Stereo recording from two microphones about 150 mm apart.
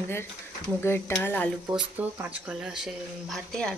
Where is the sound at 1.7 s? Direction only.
10° right (ahead or behind).